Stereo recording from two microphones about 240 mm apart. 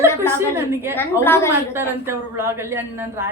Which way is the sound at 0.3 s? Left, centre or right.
Centre.